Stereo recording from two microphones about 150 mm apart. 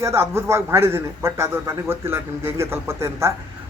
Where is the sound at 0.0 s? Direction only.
20° right (ahead or behind).